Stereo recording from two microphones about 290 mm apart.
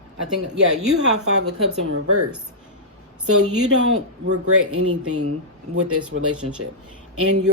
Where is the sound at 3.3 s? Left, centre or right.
Right.